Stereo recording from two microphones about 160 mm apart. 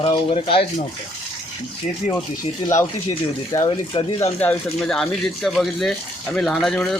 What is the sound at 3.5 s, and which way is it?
Speech, 20° left (ahead or behind).